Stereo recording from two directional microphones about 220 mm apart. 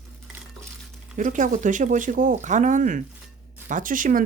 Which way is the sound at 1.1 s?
35° right (ahead or behind).